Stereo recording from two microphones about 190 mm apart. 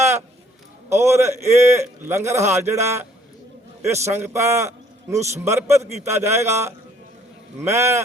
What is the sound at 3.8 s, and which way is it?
A man's voice, 15° right (ahead or behind).